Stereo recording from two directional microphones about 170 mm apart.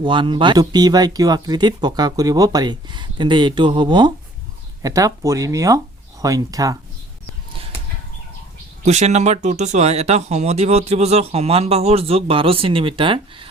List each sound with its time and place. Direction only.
0.0 s speech: 30° right (ahead or behind)
8.8 s speech: 40° right (ahead or behind)